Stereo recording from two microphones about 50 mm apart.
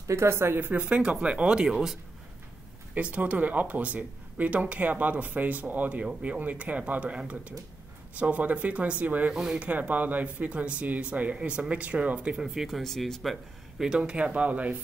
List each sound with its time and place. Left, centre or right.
0.1 s speech: right
0.7 s speech: right
2.9 s speech: right
9.3 s speech: centre
9.6 s speech: right
12.4 s speech: centre
13.9 s speech: right